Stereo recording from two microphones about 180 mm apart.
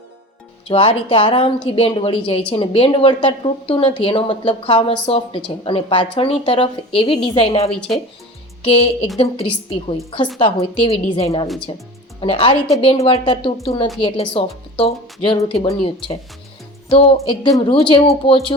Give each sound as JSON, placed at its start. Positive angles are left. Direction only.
{"t": 0.7, "sound": "a woman's voice", "side_deg": 30}
{"t": 7.7, "sound": "speech", "side_deg": 0}
{"t": 8.6, "sound": "a woman's voice", "side_deg": 30}
{"t": 17.2, "sound": "a woman's voice", "side_deg": 25}